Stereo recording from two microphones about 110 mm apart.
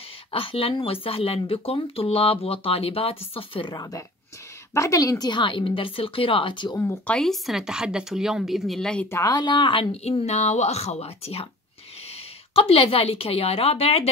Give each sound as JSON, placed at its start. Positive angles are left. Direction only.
{"t": 0.3, "sound": "speech", "side_deg": 55}
{"t": 4.7, "sound": "a woman's voice", "side_deg": 30}
{"t": 5.3, "sound": "speech", "side_deg": 50}
{"t": 7.1, "sound": "speech", "side_deg": 5}
{"t": 9.1, "sound": "speech", "side_deg": 35}
{"t": 10.2, "sound": "a woman's voice", "side_deg": 90}